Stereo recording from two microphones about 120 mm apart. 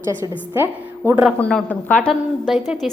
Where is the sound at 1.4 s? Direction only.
10° left (ahead or behind).